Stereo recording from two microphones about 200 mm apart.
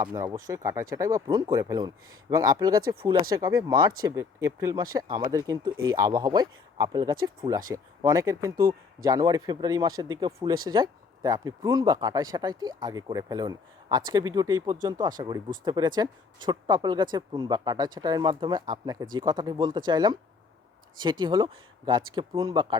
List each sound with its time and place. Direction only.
0.0 s speech: 20° right (ahead or behind)